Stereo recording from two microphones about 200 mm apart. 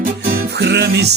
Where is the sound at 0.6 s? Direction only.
60° right (ahead or behind).